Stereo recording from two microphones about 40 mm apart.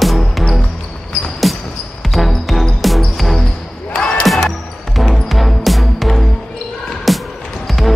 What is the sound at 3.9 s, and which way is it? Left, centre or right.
Basketball bounce, left.